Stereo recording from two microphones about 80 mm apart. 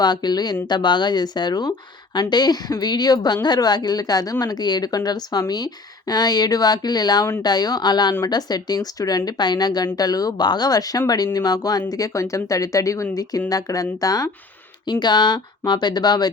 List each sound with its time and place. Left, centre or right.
0.0 s speech: left
14.8 s speech: left